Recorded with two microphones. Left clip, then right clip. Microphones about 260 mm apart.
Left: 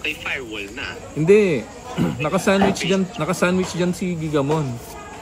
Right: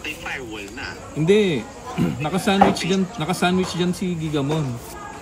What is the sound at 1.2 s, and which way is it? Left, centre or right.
Speech, left.